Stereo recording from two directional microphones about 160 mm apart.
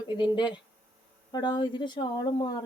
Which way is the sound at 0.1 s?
30° left (ahead or behind).